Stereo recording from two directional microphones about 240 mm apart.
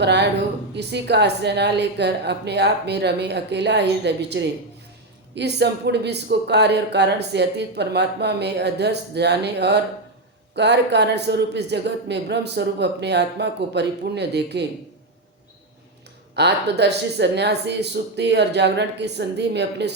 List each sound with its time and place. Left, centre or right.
0.0 s speech: right
16.3 s speech: right